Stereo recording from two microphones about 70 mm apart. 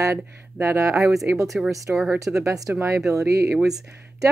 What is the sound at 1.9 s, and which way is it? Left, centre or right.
Speech, right.